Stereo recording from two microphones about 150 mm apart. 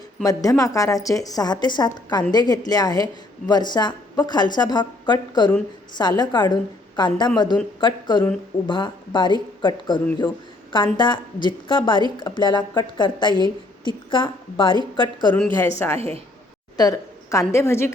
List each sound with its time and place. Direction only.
0.3 s a woman's voice: 25° left (ahead or behind)
16.0 s a woman's voice: 40° right (ahead or behind)
16.7 s a woman's voice: 25° left (ahead or behind)